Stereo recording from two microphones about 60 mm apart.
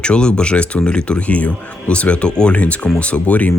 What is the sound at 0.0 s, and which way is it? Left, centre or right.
Speech, centre.